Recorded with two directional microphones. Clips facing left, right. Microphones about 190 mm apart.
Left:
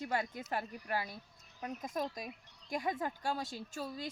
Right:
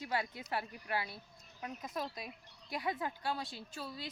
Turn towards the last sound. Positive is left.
turn(degrees=45)  # may be behind; listen again after turning